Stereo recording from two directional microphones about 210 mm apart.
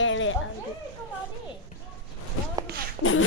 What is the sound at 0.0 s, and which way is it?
Children playing, 65° left (ahead or behind).